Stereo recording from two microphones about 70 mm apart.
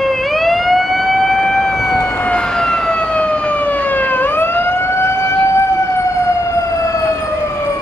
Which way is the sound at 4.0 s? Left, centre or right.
Left.